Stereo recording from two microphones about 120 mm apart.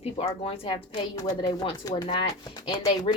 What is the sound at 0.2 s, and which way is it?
Speech, 50° left (ahead or behind).